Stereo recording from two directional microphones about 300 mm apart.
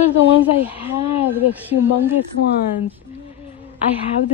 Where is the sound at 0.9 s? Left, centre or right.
Centre.